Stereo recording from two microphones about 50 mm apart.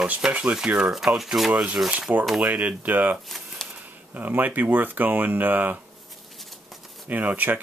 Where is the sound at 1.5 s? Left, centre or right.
Right.